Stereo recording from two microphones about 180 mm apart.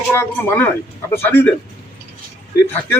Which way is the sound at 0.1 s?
10° left (ahead or behind).